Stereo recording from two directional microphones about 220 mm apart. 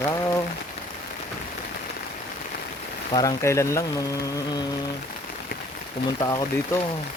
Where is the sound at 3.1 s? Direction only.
15° left (ahead or behind).